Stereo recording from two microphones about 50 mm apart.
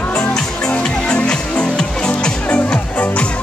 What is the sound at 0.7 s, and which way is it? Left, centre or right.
Music, left.